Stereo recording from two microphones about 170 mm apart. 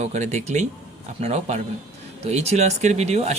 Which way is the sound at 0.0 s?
45° right (ahead or behind).